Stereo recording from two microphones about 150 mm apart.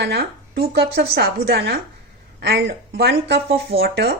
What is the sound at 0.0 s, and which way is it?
A woman's voice, 90° right.